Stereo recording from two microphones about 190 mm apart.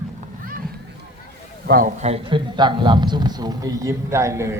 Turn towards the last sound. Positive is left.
turn(degrees=-15)  # may be behind; listen again after turning